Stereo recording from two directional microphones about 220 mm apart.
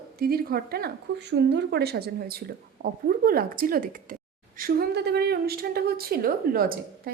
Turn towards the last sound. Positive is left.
turn(degrees=-40)  # may be behind; listen again after turning